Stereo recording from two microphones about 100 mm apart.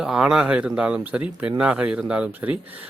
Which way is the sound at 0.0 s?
5° right (ahead or behind).